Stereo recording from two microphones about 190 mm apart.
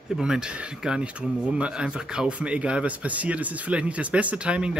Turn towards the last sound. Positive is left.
turn(degrees=-5)  # may be behind; listen again after turning